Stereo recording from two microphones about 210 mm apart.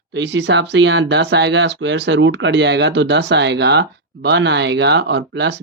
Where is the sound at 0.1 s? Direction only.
60° right (ahead or behind).